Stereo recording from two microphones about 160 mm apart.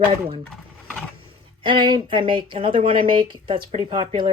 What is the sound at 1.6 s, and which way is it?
Speech, 30° right (ahead or behind).